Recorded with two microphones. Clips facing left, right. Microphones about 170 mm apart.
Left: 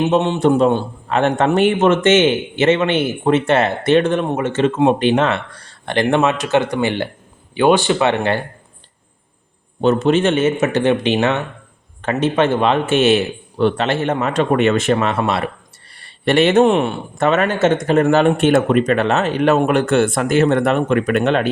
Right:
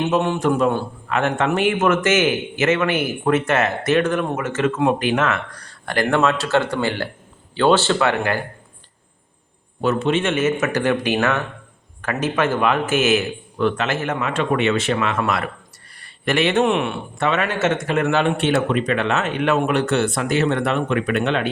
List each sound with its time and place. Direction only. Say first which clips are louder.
0.0 s speech: left 4 dB; 20° left (ahead or behind)
9.8 s speech: left 5 dB; 40° left (ahead or behind)